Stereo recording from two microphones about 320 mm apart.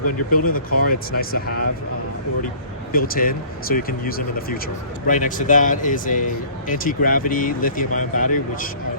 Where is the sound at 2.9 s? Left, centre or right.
Left.